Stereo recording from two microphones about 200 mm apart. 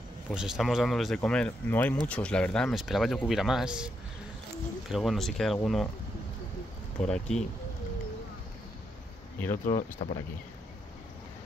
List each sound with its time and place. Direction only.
0.3 s speech: 5° right (ahead or behind)
7.0 s speech: 5° left (ahead or behind)
9.7 s speech: 40° left (ahead or behind)